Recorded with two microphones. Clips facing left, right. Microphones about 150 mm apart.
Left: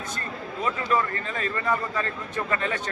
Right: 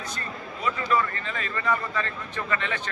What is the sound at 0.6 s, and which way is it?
A man's voice, 40° left (ahead or behind).